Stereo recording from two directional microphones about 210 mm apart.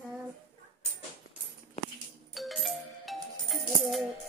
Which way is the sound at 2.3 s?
Centre (ahead or behind).